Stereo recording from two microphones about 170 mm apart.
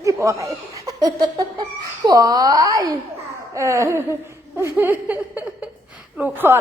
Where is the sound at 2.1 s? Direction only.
20° right (ahead or behind).